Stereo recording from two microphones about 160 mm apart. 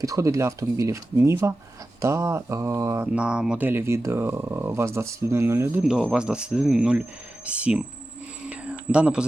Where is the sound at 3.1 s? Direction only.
5° right (ahead or behind).